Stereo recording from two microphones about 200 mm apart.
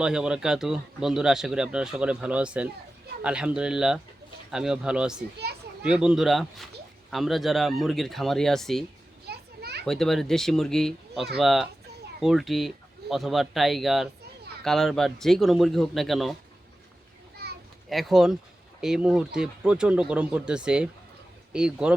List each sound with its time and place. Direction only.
0.0 s speech: 5° right (ahead or behind)
9.2 s children playing: 55° right (ahead or behind)
9.8 s speech: centre (ahead or behind)
17.4 s children playing: 55° right (ahead or behind)
17.8 s speech: centre (ahead or behind)